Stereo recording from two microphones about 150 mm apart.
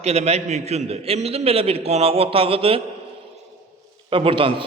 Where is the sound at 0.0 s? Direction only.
45° right (ahead or behind).